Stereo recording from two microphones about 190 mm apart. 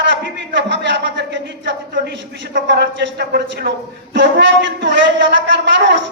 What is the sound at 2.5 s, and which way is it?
A man's voice, 60° right (ahead or behind).